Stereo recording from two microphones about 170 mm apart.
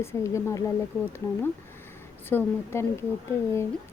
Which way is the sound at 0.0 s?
15° left (ahead or behind).